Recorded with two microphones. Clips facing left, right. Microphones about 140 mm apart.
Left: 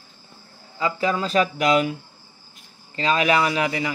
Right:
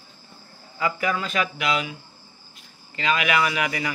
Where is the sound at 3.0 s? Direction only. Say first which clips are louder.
Left 3 dB; 35° left (ahead or behind).